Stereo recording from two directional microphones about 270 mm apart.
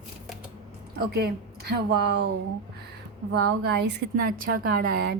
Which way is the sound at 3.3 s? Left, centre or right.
Right.